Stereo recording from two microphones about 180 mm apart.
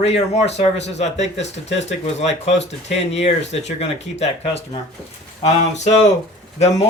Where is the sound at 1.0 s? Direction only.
40° left (ahead or behind).